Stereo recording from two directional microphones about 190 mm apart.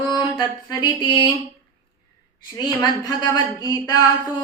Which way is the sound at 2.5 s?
20° left (ahead or behind).